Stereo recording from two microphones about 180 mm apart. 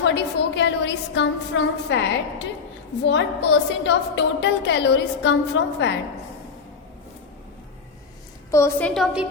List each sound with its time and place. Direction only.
0.0 s a woman's voice: 75° left (ahead or behind)
3.0 s a woman's voice: 80° left
8.4 s a woman's voice: 15° left (ahead or behind)
8.9 s a woman's voice: centre (ahead or behind)